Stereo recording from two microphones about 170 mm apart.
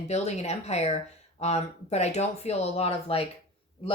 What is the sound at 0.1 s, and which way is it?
Speech, 40° left (ahead or behind).